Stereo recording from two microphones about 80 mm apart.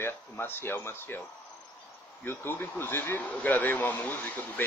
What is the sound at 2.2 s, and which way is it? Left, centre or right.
Speech, left.